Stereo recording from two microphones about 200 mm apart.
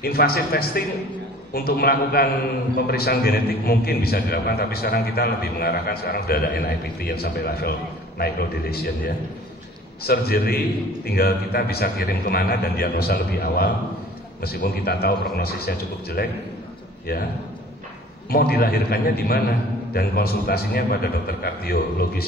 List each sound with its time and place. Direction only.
0.0 s a man's voice: 50° left (ahead or behind)
18.3 s a man's voice: 50° left (ahead or behind)